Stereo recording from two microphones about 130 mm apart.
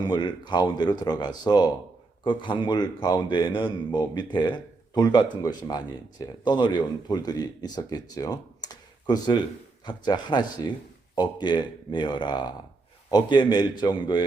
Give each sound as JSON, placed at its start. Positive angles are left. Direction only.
{"t": 0.0, "sound": "a man's voice", "side_deg": 35}